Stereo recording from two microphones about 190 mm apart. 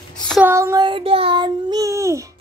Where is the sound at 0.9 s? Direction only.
30° right (ahead or behind).